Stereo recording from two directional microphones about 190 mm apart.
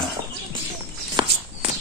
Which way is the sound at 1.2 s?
25° right (ahead or behind).